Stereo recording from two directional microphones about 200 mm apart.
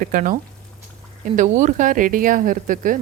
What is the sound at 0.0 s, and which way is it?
Speech, 45° right (ahead or behind).